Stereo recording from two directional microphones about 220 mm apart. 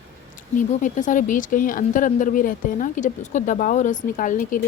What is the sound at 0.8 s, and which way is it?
Speech, 35° left (ahead or behind).